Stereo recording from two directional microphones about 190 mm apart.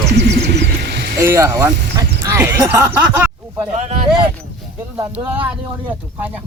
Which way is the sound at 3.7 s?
35° right (ahead or behind).